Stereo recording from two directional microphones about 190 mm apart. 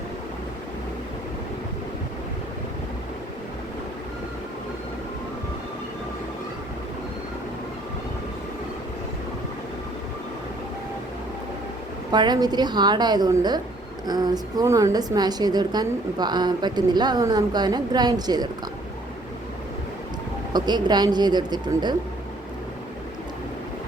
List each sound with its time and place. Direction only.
12.1 s a woman's voice: 20° right (ahead or behind)
20.5 s a woman's voice: 20° right (ahead or behind)